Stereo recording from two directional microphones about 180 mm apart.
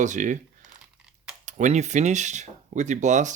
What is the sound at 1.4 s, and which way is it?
Speech, 40° right (ahead or behind).